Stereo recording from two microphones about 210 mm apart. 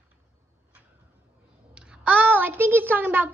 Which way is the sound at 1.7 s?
5° right (ahead or behind).